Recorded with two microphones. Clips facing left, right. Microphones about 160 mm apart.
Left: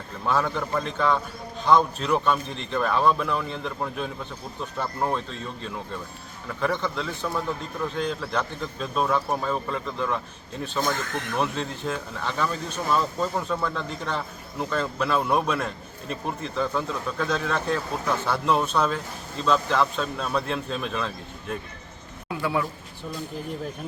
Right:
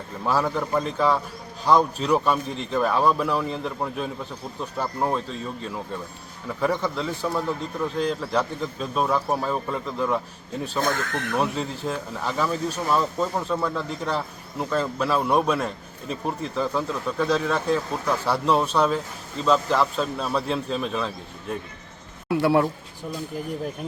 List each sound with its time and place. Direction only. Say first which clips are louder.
0.3 s a man's voice: right 2 dB; 5° right (ahead or behind)
11.3 s a man's voice: right 2 dB; 5° right (ahead or behind)
22.3 s speech: right 7 dB; 70° right (ahead or behind)